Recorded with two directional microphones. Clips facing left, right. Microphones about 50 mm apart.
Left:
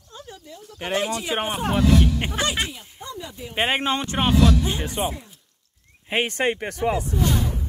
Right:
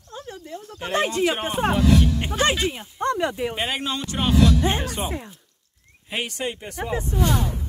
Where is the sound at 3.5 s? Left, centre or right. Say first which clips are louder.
Left 4 dB; left.